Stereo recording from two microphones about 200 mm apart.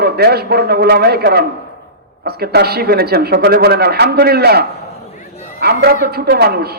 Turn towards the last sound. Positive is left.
turn(degrees=-50)  # may be behind; listen again after turning